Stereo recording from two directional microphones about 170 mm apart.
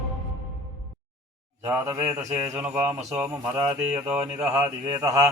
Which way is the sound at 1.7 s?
15° right (ahead or behind).